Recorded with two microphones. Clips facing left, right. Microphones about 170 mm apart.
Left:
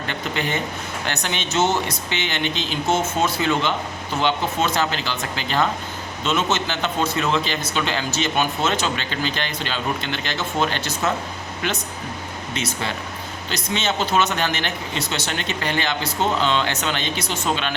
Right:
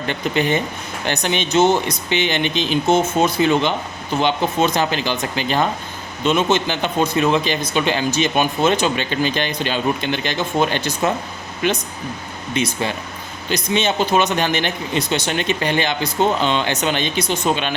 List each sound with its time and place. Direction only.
0.1 s speech: 20° right (ahead or behind)